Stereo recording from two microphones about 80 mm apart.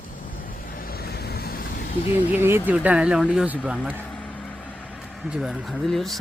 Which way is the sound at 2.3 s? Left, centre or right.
Right.